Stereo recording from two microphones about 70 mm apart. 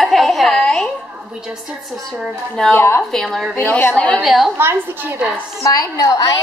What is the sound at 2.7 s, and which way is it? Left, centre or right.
Speech, left.